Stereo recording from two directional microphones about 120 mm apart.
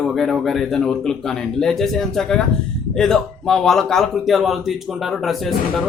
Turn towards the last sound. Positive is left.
turn(degrees=0)  # may be behind; listen again after turning